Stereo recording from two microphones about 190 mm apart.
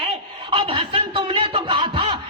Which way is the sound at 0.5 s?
25° right (ahead or behind).